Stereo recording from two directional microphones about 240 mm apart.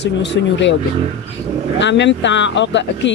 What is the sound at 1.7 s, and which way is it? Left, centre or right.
Speech, left.